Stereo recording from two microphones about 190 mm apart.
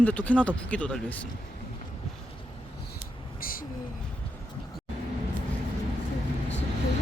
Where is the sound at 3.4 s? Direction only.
50° left (ahead or behind).